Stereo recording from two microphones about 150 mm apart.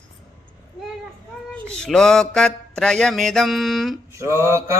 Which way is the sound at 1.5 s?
5° left (ahead or behind).